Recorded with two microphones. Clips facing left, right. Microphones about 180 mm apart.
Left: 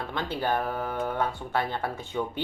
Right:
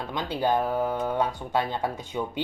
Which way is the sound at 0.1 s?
15° right (ahead or behind).